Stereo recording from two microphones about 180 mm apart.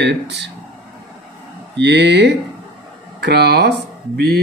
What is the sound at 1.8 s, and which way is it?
Speech, 70° right (ahead or behind).